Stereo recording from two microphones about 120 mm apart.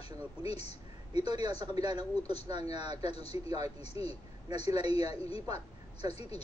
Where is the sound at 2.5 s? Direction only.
60° left (ahead or behind).